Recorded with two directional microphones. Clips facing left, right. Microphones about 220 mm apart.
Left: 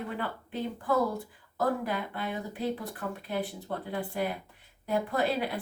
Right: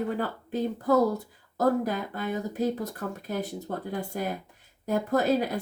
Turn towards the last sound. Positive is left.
turn(degrees=-40)  # may be behind; listen again after turning